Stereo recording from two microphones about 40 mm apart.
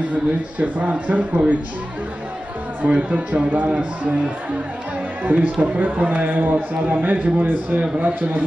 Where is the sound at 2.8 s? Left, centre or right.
Right.